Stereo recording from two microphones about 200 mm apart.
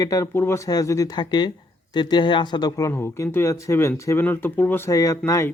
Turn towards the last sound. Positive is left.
turn(degrees=15)  # may be behind; listen again after turning